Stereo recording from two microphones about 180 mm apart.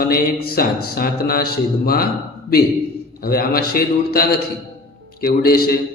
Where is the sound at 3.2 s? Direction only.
55° left (ahead or behind).